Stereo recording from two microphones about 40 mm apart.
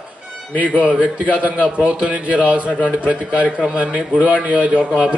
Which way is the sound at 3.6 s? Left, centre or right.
Right.